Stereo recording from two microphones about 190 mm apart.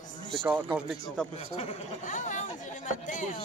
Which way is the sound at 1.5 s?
40° left (ahead or behind).